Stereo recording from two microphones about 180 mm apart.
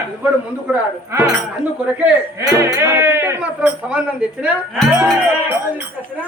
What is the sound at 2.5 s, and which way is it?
Speech, 15° right (ahead or behind).